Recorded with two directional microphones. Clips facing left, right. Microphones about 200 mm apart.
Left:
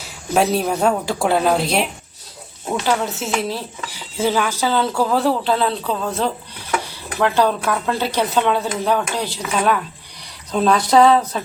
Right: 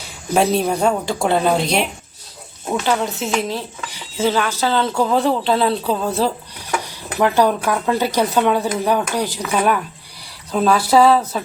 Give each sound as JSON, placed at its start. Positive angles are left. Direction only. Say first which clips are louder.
{"t": 0.0, "sound": "a woman's voice", "louder": "right 1 dB", "side_deg": 0}
{"t": 10.5, "sound": "a woman's voice", "louder": "even", "side_deg": -5}